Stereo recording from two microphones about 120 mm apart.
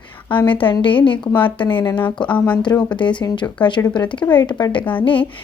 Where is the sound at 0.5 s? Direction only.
45° left (ahead or behind).